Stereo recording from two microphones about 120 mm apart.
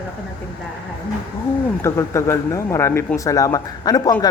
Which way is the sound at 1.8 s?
25° left (ahead or behind).